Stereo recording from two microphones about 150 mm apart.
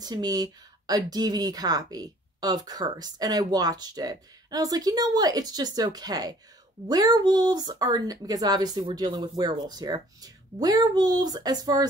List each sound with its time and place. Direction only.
0.0 s speech: 25° right (ahead or behind)